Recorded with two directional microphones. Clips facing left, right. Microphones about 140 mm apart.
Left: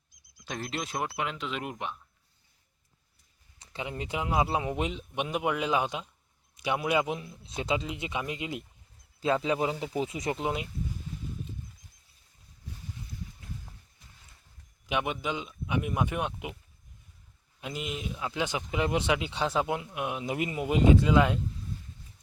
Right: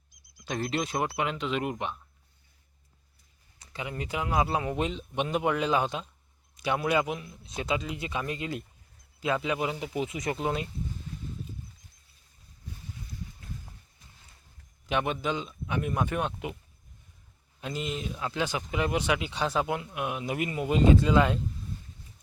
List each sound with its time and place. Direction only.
0.4 s speech: centre (ahead or behind)
3.6 s speech: 25° left (ahead or behind)
7.1 s speech: 30° left (ahead or behind)
9.2 s speech: 30° left (ahead or behind); by 10.7 s 15° left (ahead or behind)
14.8 s speech: 10° left (ahead or behind)
17.6 s speech: 10° left (ahead or behind)